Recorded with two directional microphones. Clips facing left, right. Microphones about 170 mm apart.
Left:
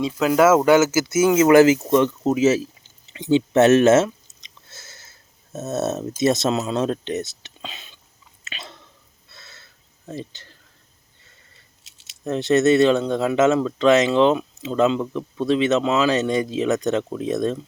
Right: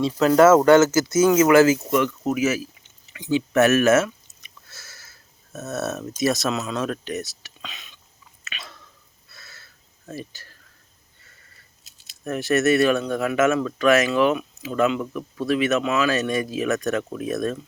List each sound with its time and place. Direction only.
0.2 s speech: 5° left (ahead or behind)
1.1 s speech: 25° left (ahead or behind)
8.4 s chewing: 25° left (ahead or behind)
9.3 s a sound: 25° left (ahead or behind)
10.1 s speech: 20° left (ahead or behind)
12.0 s speech: 20° left (ahead or behind)